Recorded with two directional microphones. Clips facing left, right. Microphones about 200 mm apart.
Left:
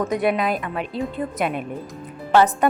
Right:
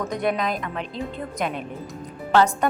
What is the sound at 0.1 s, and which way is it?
A woman's voice, 5° left (ahead or behind).